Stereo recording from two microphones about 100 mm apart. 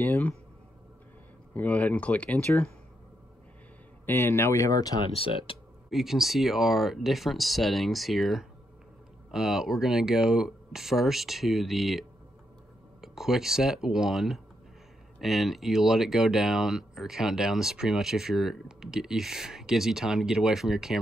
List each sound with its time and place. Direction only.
0.0 s a sound: 20° left (ahead or behind)
1.5 s speech: 15° left (ahead or behind)
4.0 s speech: 20° left (ahead or behind)
5.0 s speech: 65° left (ahead or behind)
5.9 s speech: 5° right (ahead or behind)